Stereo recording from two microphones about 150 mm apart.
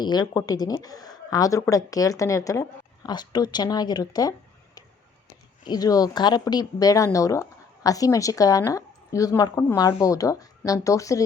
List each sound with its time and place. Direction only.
0.0 s a woman's voice: 30° left (ahead or behind)